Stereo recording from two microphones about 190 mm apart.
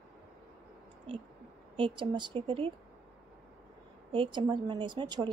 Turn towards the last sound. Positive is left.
turn(degrees=-25)  # may be behind; listen again after turning